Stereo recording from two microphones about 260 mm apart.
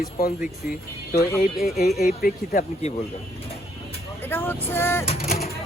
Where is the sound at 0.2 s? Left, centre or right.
Left.